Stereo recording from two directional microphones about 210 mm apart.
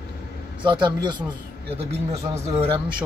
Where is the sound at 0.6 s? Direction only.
20° right (ahead or behind).